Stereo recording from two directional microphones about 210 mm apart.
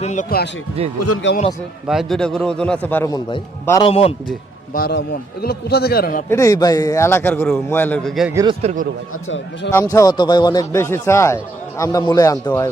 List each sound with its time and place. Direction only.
0.0 s speech: 35° left (ahead or behind)
0.8 s speech: 30° right (ahead or behind)
1.1 s speech: 60° left (ahead or behind)
1.9 s a man's voice: centre (ahead or behind); by 4.1 s 25° left (ahead or behind)
4.7 s a man's voice: 50° left (ahead or behind)
6.2 s a man's voice: 15° left (ahead or behind)
8.3 s a man's voice: 15° right (ahead or behind)
8.6 s a man's voice: 40° right (ahead or behind)
9.7 s a man's voice: 15° left (ahead or behind)